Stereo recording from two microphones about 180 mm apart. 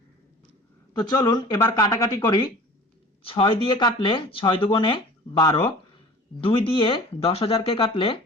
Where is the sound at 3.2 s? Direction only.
30° left (ahead or behind).